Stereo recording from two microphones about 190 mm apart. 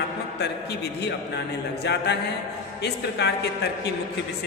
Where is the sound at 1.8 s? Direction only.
65° left (ahead or behind).